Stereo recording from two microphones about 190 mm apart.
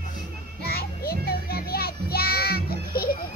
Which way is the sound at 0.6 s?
55° left (ahead or behind).